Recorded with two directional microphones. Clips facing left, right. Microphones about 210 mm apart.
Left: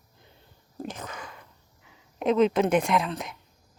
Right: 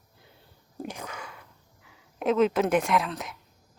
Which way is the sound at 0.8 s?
10° right (ahead or behind).